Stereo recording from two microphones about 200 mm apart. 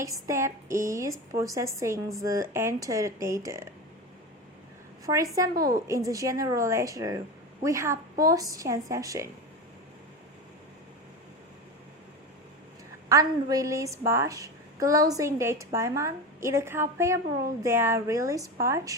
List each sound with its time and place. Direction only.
0.3 s a woman's voice: 15° right (ahead or behind)
5.0 s a woman's voice: 15° right (ahead or behind)
5.5 s a woman's voice: 45° right (ahead or behind)
6.1 s a woman's voice: 15° right (ahead or behind)
13.1 s a woman's voice: 15° right (ahead or behind)